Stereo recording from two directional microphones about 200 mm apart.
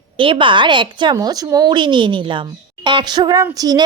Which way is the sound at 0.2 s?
25° right (ahead or behind).